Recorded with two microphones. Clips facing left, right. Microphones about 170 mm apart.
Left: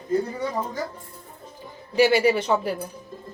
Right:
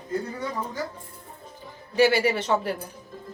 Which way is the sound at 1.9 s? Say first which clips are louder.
Left 2 dB; 20° left (ahead or behind).